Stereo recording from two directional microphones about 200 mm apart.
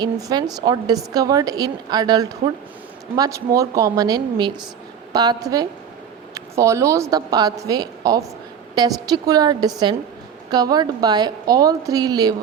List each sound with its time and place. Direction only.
0.0 s a woman's voice: 20° right (ahead or behind)